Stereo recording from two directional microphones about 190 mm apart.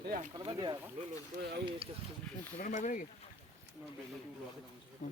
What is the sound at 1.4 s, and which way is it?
Speech, 60° right (ahead or behind).